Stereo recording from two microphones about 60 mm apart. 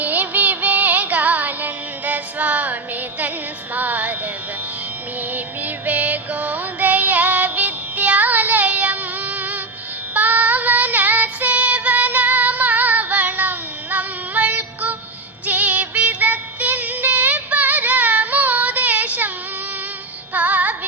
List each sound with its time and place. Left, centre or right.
0.0 s music: right
3.8 s music: right
5.3 s music: right
10.2 s child singing: right
15.4 s music: right
20.3 s music: right